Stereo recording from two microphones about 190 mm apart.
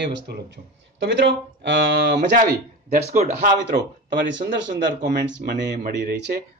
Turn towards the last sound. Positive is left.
turn(degrees=-60)  # may be behind; listen again after turning